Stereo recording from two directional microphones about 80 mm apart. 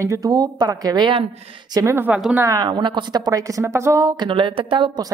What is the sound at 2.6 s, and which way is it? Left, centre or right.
A woman's voice, right.